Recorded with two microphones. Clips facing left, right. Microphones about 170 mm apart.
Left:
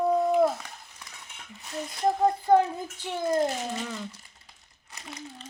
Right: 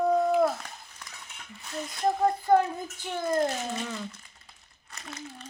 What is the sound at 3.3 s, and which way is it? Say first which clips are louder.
Speech: even; 15° left (ahead or behind).